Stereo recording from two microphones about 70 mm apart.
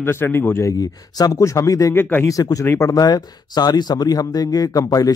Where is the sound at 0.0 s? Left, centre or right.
Left.